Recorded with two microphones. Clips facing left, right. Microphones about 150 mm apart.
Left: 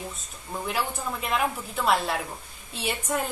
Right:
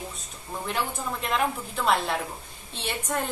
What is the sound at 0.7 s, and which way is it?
A woman's voice, 5° left (ahead or behind).